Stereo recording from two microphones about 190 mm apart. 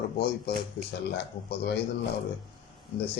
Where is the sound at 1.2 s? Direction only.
60° left (ahead or behind).